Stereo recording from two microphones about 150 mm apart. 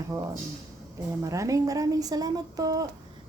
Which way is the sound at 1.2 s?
20° right (ahead or behind).